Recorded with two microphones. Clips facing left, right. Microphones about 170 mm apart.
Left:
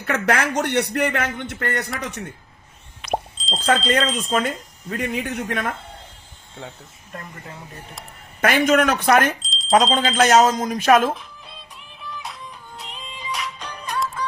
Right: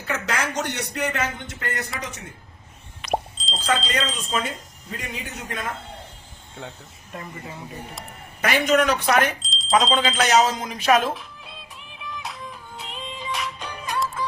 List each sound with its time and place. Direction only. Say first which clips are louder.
0.0 s speech: left 6 dB; 60° left (ahead or behind)
3.0 s plop: even; centre (ahead or behind)
3.8 s speech: left 6 dB; 50° left (ahead or behind)
6.6 s speech: left 1 dB; centre (ahead or behind)
8.4 s speech: left 3 dB; 50° left (ahead or behind)
9.4 s a sound: even; centre (ahead or behind)
9.7 s speech: left 3 dB; 40° left (ahead or behind)
11.1 s music: left 2 dB; centre (ahead or behind)